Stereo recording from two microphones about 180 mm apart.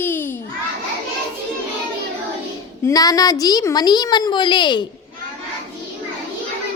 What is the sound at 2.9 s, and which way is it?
A woman's voice, 20° left (ahead or behind).